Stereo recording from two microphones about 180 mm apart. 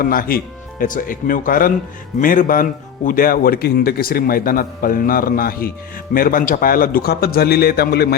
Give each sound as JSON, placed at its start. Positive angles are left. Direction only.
{"t": 0.0, "sound": "a man's voice", "side_deg": 55}